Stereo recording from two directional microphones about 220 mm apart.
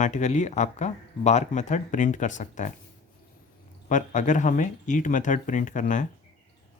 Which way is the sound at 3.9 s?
35° left (ahead or behind).